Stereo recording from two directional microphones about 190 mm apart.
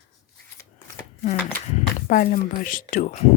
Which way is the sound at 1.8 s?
45° left (ahead or behind).